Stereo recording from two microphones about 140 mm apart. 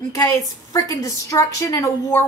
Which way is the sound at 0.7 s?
25° left (ahead or behind).